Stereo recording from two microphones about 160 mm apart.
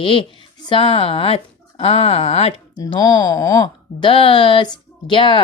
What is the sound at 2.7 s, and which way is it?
Speech, 25° left (ahead or behind).